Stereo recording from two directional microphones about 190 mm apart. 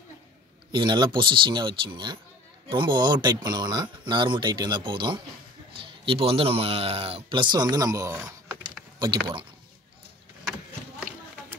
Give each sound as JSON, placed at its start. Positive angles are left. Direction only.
{"t": 0.7, "sound": "speech", "side_deg": -25}
{"t": 9.0, "sound": "speech", "side_deg": -25}